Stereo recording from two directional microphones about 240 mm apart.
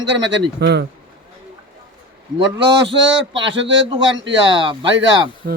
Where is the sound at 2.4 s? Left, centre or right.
Right.